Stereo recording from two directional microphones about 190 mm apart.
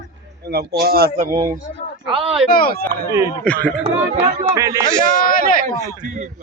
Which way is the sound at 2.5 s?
50° left (ahead or behind).